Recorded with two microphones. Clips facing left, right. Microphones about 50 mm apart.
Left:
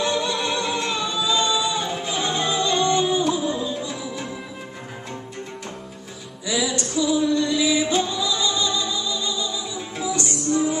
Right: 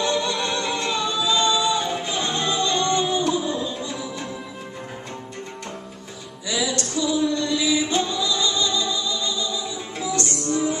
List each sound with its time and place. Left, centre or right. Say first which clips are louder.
0.0 s music: even; centre
1.4 s music: right 2 dB; centre
6.4 s music: left 1 dB; centre
8.5 s music: even; centre
9.9 s music: even; centre